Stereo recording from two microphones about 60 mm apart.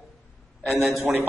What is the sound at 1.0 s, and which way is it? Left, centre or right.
Speech, right.